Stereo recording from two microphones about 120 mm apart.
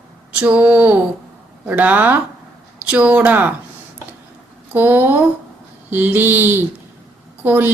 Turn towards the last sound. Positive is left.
turn(degrees=-15)  # may be behind; listen again after turning